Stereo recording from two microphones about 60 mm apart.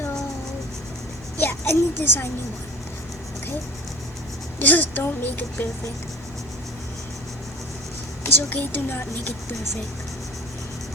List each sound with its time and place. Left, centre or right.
1.4 s a child's voice: left
4.6 s a woman's voice: left
8.2 s a child's voice: left